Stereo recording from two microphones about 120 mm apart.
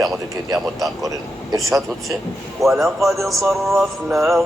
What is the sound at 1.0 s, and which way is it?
Speech, 30° right (ahead or behind).